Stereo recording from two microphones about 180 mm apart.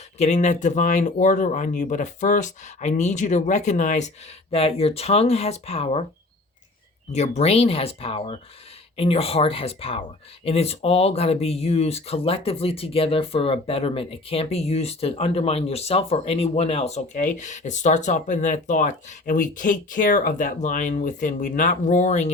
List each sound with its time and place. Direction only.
0.2 s speech: 40° left (ahead or behind)
7.1 s speech: 40° left (ahead or behind)